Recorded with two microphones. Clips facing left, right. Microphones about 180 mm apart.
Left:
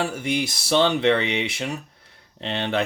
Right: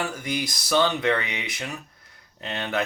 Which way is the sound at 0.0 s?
30° left (ahead or behind).